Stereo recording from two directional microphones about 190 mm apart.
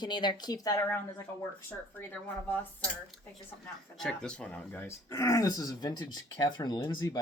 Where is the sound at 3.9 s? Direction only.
5° left (ahead or behind).